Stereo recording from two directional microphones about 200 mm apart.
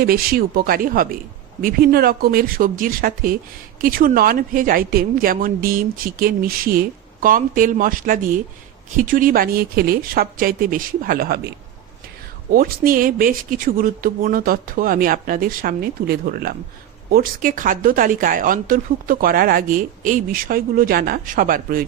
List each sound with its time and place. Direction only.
0.0 s speech: 45° right (ahead or behind)
12.5 s speech: 45° right (ahead or behind)